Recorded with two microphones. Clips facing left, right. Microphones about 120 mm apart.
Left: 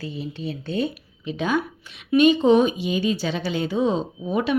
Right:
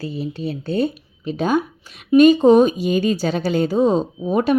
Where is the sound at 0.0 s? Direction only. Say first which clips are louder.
Right 5 dB; 40° right (ahead or behind).